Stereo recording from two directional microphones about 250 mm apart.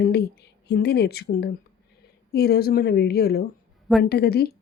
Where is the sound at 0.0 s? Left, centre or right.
Left.